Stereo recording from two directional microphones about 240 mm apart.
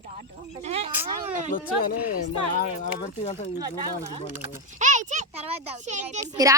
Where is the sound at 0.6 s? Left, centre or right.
Right.